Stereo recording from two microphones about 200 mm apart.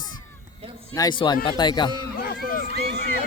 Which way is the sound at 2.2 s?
50° left (ahead or behind).